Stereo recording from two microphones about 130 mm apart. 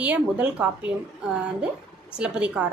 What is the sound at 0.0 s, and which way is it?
A woman's voice, 10° right (ahead or behind).